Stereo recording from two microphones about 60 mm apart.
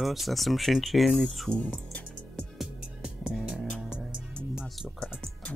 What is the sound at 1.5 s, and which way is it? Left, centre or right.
Music, left.